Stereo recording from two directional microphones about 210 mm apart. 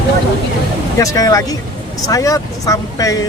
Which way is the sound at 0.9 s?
15° left (ahead or behind).